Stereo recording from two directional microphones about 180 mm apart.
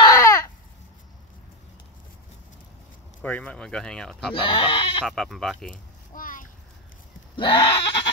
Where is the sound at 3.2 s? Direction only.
10° left (ahead or behind).